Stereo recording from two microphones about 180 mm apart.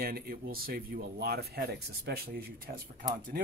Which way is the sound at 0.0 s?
55° right (ahead or behind).